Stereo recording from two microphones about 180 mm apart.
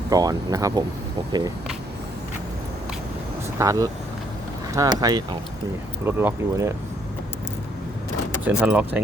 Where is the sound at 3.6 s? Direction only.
20° right (ahead or behind).